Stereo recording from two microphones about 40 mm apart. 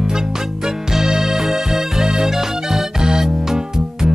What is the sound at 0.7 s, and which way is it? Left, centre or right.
Music, centre.